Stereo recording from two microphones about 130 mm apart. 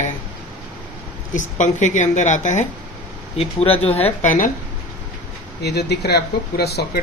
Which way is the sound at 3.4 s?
50° left (ahead or behind).